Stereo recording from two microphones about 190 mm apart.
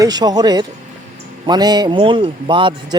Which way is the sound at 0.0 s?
20° right (ahead or behind).